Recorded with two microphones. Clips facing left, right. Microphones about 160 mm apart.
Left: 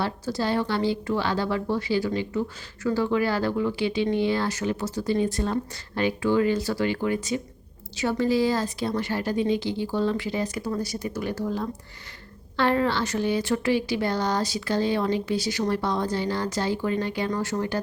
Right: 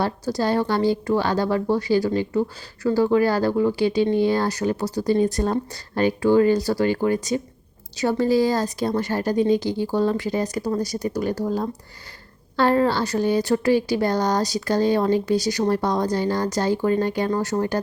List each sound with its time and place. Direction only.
0.0 s a woman's voice: 40° right (ahead or behind)